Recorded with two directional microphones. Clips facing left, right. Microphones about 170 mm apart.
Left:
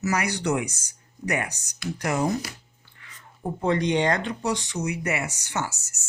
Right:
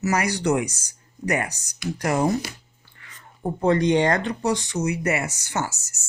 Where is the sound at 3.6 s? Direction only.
45° right (ahead or behind).